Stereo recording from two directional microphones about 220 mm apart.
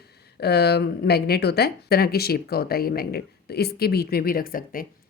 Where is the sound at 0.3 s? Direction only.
50° left (ahead or behind).